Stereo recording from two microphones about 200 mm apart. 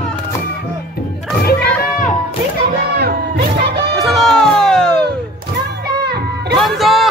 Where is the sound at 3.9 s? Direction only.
Centre (ahead or behind).